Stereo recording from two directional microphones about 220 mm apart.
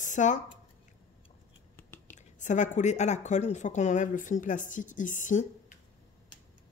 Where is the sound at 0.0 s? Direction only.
35° left (ahead or behind).